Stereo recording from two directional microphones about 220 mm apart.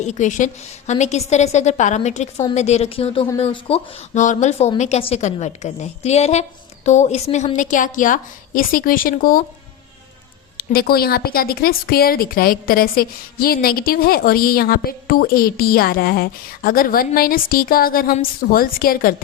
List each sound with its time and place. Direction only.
0.0 s a woman's voice: 35° left (ahead or behind)
10.6 s a woman's voice: 45° left (ahead or behind)